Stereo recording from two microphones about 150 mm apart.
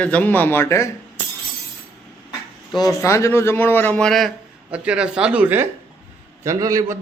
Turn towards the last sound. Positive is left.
turn(degrees=-20)  # may be behind; listen again after turning